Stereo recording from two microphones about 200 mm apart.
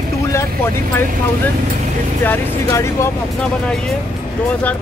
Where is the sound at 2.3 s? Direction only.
10° left (ahead or behind).